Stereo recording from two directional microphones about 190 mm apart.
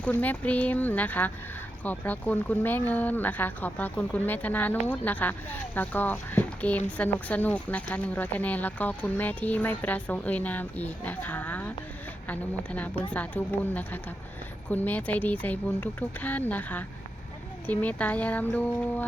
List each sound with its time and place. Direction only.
0.0 s speech: 10° left (ahead or behind)